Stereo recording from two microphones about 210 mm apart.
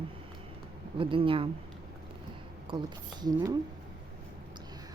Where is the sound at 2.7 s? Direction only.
25° right (ahead or behind).